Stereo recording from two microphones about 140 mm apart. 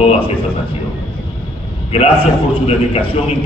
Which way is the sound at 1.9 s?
40° left (ahead or behind).